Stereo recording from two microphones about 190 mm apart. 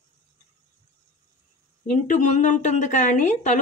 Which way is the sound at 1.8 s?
40° left (ahead or behind).